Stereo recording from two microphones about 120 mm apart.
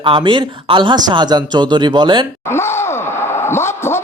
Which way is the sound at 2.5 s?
20° left (ahead or behind).